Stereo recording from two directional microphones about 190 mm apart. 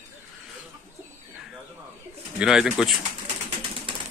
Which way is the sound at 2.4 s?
5° right (ahead or behind).